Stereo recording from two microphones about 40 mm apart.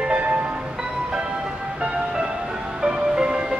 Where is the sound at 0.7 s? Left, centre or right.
Centre.